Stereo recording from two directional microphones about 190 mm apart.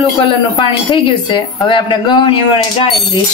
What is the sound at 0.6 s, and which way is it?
A man's voice, 25° left (ahead or behind).